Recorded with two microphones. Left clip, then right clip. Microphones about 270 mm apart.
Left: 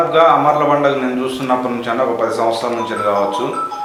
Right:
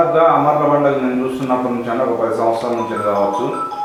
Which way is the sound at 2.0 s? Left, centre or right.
Centre.